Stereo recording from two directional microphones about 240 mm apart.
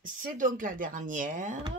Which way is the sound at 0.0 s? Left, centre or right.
Right.